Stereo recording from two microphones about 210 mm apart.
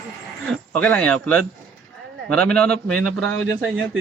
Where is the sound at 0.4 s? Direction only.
5° left (ahead or behind).